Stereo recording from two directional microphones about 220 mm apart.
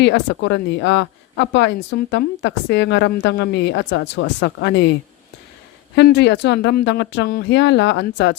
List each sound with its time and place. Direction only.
0.0 s speech: 55° left (ahead or behind)
6.0 s speech: 50° left (ahead or behind)